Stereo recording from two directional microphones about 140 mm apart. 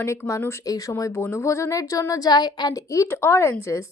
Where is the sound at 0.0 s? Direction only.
20° left (ahead or behind).